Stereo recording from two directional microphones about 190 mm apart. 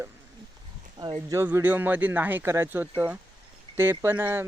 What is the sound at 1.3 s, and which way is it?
Speech, 10° right (ahead or behind).